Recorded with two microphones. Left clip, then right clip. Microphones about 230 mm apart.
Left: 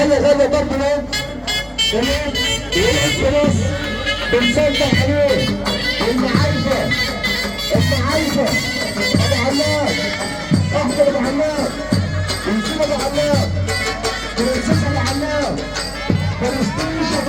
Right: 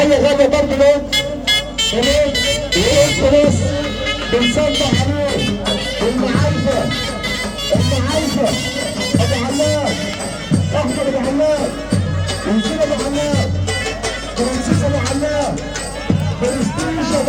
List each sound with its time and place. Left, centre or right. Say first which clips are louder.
0.0 s music: right 1 dB; right
4.0 s speech: left 1 dB; right